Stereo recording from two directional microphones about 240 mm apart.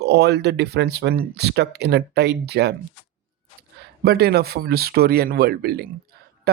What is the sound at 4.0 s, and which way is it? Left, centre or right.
Speech, right.